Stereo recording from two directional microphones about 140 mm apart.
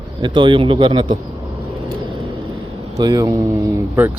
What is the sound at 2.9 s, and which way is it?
Speech, 25° right (ahead or behind).